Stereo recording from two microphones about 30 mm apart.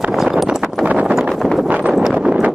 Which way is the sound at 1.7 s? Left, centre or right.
Right.